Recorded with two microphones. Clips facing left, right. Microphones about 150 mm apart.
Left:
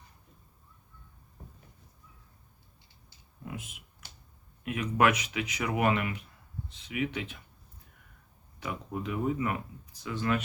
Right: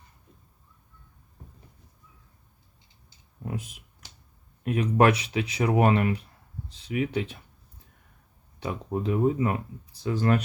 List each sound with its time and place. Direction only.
3.4 s speech: 35° right (ahead or behind)
8.5 s speech: 30° right (ahead or behind)